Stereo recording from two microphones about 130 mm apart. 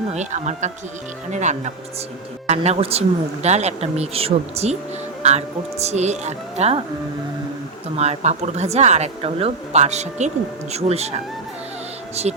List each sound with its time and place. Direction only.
0.1 s a woman's voice: 60° right (ahead or behind)
2.5 s a woman's voice: 55° right (ahead or behind)
7.9 s a woman's voice: 55° right (ahead or behind)